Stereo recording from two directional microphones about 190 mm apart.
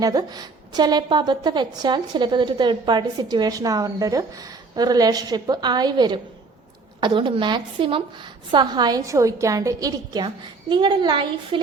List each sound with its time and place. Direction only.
0.0 s a woman's voice: 20° right (ahead or behind)